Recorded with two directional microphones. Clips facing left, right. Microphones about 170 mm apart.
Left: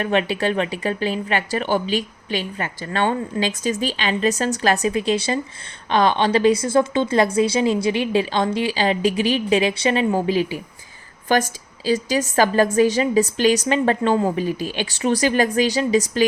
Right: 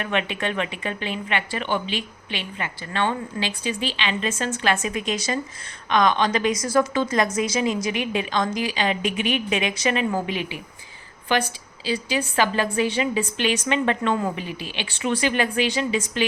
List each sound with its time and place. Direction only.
0.0 s a woman's voice: 35° left (ahead or behind)